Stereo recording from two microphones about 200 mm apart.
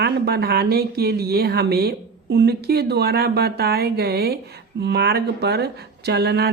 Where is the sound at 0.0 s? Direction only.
55° right (ahead or behind).